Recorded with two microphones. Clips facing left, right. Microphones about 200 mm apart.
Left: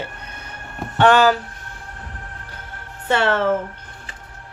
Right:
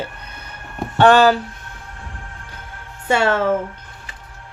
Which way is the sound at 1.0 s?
35° right (ahead or behind).